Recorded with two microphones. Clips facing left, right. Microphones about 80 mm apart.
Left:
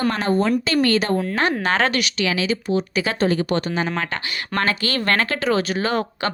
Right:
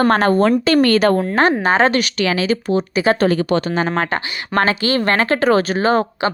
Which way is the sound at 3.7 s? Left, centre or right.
Right.